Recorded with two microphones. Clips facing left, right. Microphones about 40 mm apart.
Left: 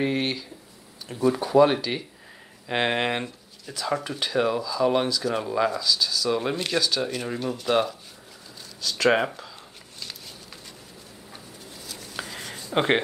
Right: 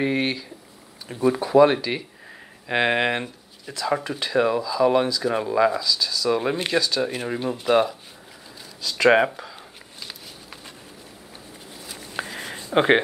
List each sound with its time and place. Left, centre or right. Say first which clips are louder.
0.0 s speech: right 2 dB; centre
4.9 s speech: right 3 dB; centre
5.2 s speech: right 4 dB; centre
6.4 s speech: right 3 dB; centre
6.8 s speech: right 2 dB; centre
7.1 s speech: right 2 dB; right
11.8 s a sound: right 4 dB; centre